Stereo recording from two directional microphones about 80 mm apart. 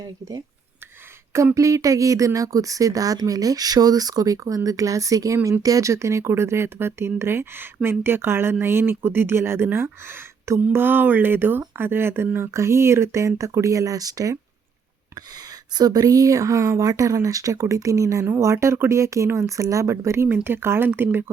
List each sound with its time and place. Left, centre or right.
1.5 s speech: right
15.7 s speech: right
20.2 s speech: right